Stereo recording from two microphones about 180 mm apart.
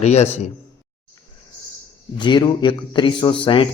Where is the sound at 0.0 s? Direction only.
35° left (ahead or behind).